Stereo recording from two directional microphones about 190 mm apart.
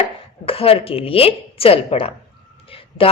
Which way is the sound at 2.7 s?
30° left (ahead or behind).